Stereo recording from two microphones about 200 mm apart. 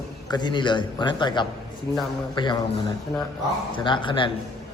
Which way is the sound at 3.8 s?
25° left (ahead or behind).